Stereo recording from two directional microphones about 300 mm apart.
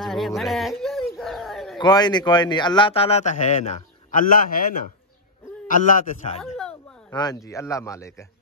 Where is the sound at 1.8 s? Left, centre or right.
Centre.